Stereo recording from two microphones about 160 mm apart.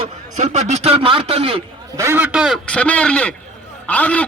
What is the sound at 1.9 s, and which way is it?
Speech, 15° right (ahead or behind).